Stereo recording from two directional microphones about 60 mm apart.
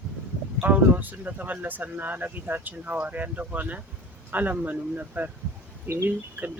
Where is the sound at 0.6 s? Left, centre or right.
Right.